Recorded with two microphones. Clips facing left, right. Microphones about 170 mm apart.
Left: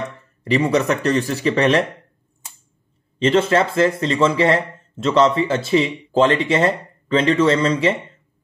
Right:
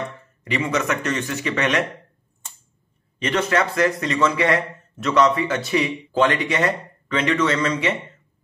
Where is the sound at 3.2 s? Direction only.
30° left (ahead or behind).